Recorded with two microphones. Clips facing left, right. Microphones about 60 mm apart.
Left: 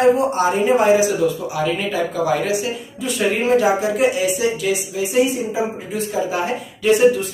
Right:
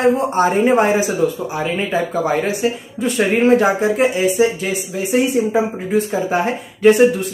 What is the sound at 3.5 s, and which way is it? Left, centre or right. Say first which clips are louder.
Speech: right 2 dB; right.